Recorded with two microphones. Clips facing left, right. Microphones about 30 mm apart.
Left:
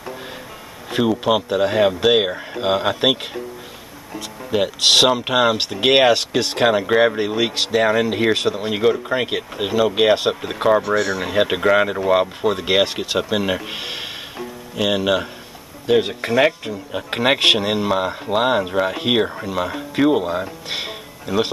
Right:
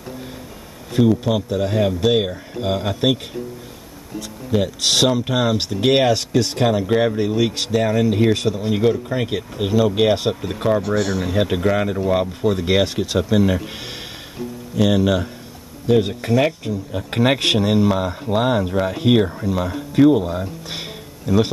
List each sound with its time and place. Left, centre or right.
0.9 s speech: left
10.8 s speech: left
11.2 s speech: left